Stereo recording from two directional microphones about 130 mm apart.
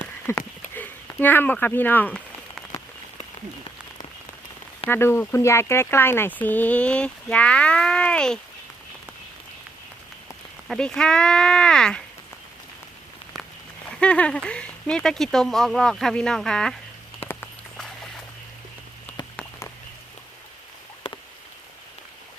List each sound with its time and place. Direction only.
0.3 s speech: 15° left (ahead or behind)
4.9 s speech: 20° left (ahead or behind)
10.7 s speech: 5° left (ahead or behind)
14.0 s speech: 10° left (ahead or behind)
17.2 s walk: 50° left (ahead or behind)
21.0 s a sound: 45° left (ahead or behind)